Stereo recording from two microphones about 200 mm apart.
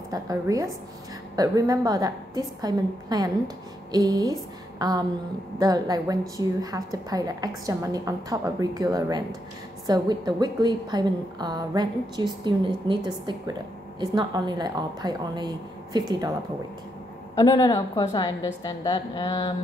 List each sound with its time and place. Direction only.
0.1 s a woman's voice: 15° right (ahead or behind)
17.4 s a woman's voice: 20° left (ahead or behind)